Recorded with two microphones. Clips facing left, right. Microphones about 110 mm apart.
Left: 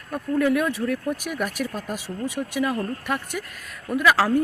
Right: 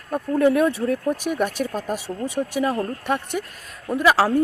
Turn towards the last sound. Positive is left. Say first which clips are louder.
# right 2 dB
turn(degrees=-30)  # may be behind; listen again after turning